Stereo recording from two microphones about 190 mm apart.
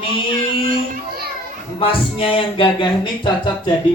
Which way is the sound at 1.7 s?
30° left (ahead or behind).